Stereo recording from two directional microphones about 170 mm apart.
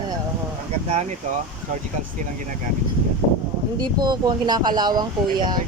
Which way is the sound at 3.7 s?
25° right (ahead or behind).